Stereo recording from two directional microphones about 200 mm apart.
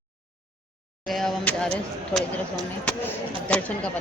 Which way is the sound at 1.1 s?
Centre (ahead or behind).